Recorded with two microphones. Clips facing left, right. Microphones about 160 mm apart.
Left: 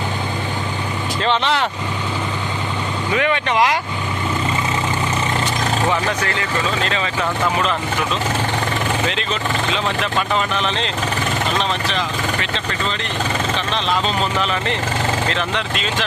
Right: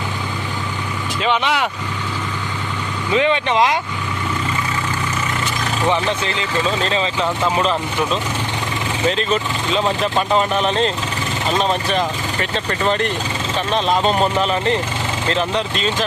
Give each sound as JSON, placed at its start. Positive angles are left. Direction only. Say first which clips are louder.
{"t": 1.2, "sound": "speech", "louder": "even", "side_deg": -10}
{"t": 3.2, "sound": "speech", "louder": "right 2 dB", "side_deg": -20}
{"t": 5.9, "sound": "speech", "louder": "right 1 dB", "side_deg": -20}